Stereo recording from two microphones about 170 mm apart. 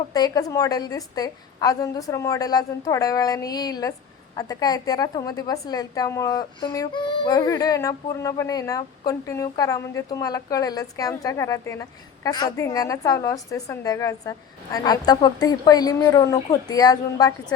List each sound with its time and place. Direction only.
0.1 s a woman's voice: 20° left (ahead or behind)